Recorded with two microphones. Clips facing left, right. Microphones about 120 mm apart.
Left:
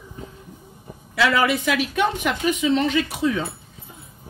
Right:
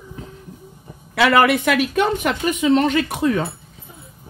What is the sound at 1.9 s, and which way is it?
Speech, 50° right (ahead or behind).